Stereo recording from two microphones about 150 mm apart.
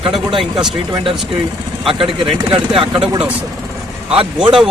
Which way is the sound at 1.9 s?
35° right (ahead or behind).